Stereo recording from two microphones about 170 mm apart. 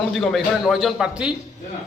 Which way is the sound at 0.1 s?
Centre (ahead or behind).